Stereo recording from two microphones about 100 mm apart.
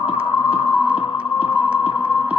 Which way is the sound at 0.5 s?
10° right (ahead or behind).